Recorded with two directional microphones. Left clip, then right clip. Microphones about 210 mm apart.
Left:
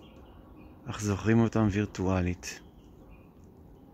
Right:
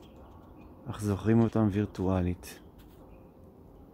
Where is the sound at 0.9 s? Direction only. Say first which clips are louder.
Left 1 dB; 5° right (ahead or behind).